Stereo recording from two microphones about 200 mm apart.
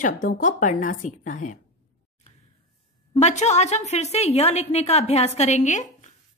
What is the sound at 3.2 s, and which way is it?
A woman's voice, 35° left (ahead or behind).